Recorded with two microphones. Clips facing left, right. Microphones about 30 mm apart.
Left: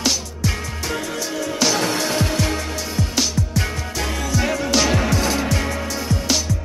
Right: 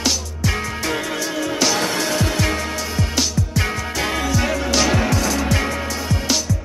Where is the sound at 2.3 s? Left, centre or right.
Centre.